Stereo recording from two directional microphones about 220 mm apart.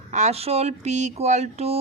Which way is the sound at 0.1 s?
30° right (ahead or behind).